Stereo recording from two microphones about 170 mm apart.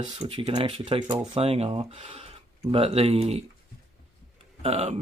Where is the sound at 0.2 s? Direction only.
30° right (ahead or behind).